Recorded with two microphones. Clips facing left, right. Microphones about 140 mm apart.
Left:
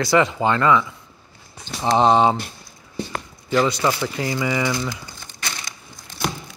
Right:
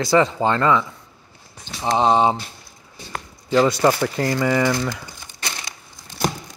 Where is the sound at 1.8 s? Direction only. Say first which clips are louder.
Left 1 dB; 5° right (ahead or behind).